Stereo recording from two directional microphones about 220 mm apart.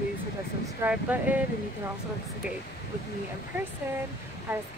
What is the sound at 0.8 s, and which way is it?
Speech, 5° right (ahead or behind).